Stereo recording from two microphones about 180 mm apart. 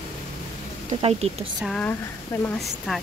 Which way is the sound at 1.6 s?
5° left (ahead or behind).